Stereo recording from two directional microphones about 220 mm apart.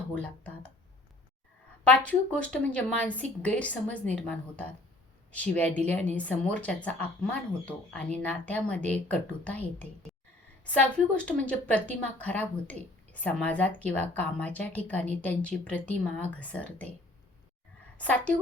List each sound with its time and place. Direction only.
0.1 s speech: 5° left (ahead or behind)
1.8 s a woman's voice: 5° left (ahead or behind)
5.3 s a woman's voice: 5° left (ahead or behind)
17.9 s a woman's voice: 5° left (ahead or behind)